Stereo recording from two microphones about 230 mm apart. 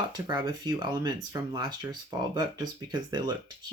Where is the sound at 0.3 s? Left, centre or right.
Centre.